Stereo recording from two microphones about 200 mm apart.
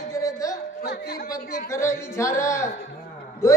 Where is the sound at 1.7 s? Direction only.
15° left (ahead or behind).